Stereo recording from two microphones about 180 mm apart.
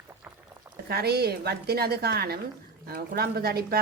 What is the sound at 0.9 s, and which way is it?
A woman's voice, 60° right (ahead or behind).